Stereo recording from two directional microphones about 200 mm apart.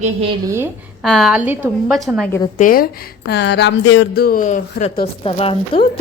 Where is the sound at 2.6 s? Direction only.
45° left (ahead or behind).